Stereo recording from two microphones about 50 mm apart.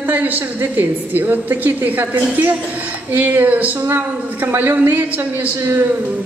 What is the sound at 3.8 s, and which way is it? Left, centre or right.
A woman's voice, right.